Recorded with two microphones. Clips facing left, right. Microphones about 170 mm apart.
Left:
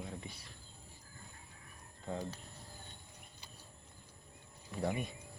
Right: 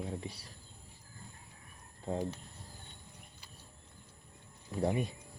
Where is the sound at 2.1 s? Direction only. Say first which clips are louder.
Right 5 dB; 25° right (ahead or behind).